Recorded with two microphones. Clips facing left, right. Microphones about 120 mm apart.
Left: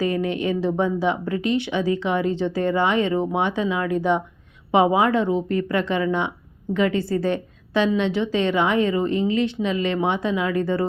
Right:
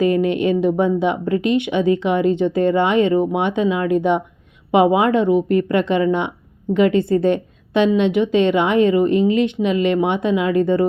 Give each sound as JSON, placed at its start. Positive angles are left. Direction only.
{"t": 0.0, "sound": "a woman's voice", "side_deg": -20}